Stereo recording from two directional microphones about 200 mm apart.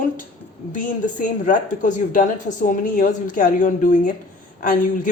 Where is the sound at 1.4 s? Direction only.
40° left (ahead or behind).